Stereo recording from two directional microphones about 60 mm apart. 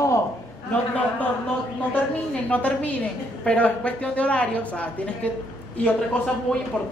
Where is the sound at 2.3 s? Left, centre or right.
Left.